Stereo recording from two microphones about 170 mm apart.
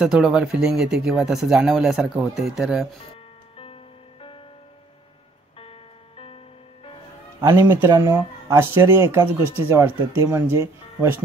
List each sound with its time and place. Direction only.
0.0 s speech: 5° right (ahead or behind)
3.5 s music: 35° left (ahead or behind)
5.6 s music: 35° left (ahead or behind)
7.4 s speech: 15° right (ahead or behind)